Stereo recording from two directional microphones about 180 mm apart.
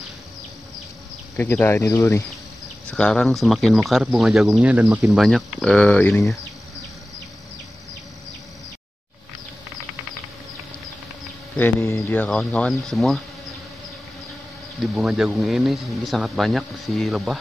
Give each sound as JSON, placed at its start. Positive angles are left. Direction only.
{"t": 1.3, "sound": "speech", "side_deg": 10}
{"t": 2.9, "sound": "speech", "side_deg": 5}
{"t": 5.1, "sound": "speech", "side_deg": 0}
{"t": 11.5, "sound": "speech", "side_deg": 15}
{"t": 14.8, "sound": "speech", "side_deg": 0}